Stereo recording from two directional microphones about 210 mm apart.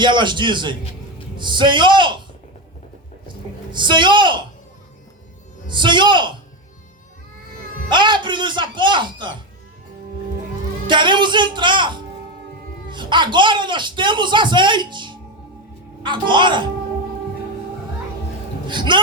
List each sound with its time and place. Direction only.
0.0 s a man's voice: 20° right (ahead or behind)
3.7 s a man's voice: 20° right (ahead or behind)
5.6 s a man's voice: 20° right (ahead or behind)
7.9 s a man's voice: 20° right (ahead or behind)
10.8 s a man's voice: 20° right (ahead or behind)
18.7 s a man's voice: 20° right (ahead or behind)